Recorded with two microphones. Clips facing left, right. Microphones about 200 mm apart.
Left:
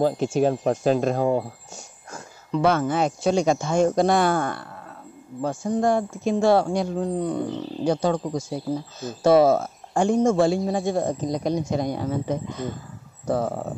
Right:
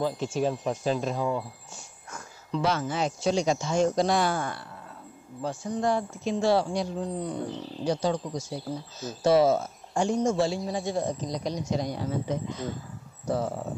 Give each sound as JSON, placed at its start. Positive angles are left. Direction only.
{"t": 0.0, "sound": "speech", "side_deg": 50}
{"t": 2.5, "sound": "speech", "side_deg": 55}